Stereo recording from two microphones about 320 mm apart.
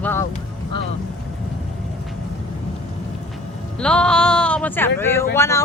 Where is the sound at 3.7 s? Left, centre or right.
Centre.